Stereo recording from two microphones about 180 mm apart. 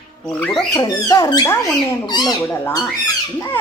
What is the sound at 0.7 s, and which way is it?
Speech, 20° left (ahead or behind).